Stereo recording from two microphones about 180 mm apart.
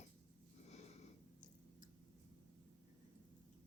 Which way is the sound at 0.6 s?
35° left (ahead or behind).